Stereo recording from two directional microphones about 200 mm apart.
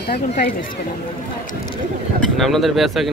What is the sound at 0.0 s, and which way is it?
Speech, 55° left (ahead or behind).